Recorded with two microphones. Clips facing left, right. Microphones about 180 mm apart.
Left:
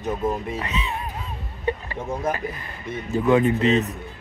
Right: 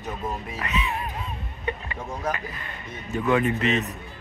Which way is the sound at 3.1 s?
25° left (ahead or behind).